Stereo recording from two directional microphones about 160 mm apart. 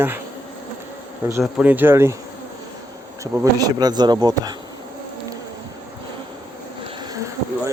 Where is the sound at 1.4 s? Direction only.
5° right (ahead or behind).